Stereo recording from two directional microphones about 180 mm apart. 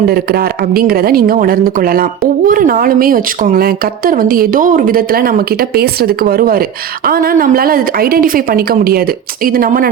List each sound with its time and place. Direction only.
0.0 s a woman's voice: 55° right (ahead or behind)